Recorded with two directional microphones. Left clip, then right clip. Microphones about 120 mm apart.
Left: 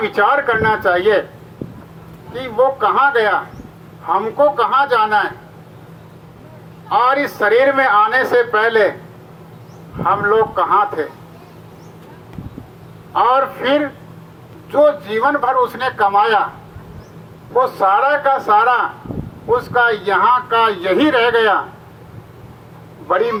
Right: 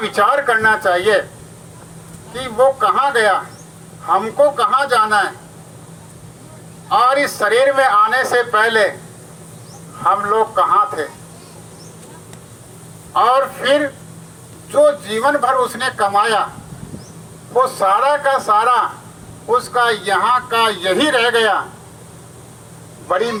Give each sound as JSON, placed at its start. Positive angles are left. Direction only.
{"t": 0.0, "sound": "speech", "side_deg": 30}
{"t": 2.3, "sound": "speech", "side_deg": 25}
{"t": 6.9, "sound": "speech", "side_deg": 25}
{"t": 10.0, "sound": "speech", "side_deg": 30}
{"t": 13.1, "sound": "speech", "side_deg": 25}
{"t": 17.6, "sound": "speech", "side_deg": 25}
{"t": 23.0, "sound": "speech", "side_deg": 30}